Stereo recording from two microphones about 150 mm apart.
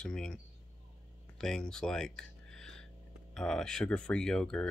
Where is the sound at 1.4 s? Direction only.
5° left (ahead or behind).